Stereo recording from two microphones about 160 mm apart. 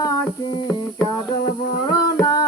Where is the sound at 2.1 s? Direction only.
25° left (ahead or behind).